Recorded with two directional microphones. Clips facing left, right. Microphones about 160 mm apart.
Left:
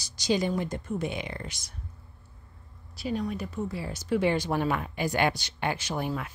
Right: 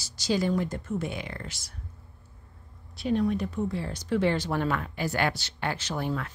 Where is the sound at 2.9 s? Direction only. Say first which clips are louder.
Right 5 dB; centre (ahead or behind).